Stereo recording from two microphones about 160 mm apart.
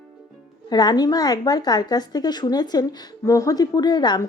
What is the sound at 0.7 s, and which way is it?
A woman's voice, 25° left (ahead or behind).